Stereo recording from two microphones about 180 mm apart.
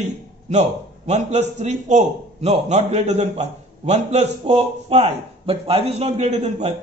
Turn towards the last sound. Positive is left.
turn(degrees=-35)  # may be behind; listen again after turning